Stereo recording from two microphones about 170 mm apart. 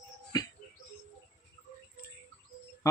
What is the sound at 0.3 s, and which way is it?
Music, 20° left (ahead or behind).